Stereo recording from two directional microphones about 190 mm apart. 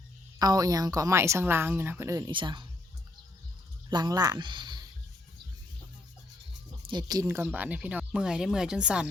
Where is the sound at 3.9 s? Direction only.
20° right (ahead or behind).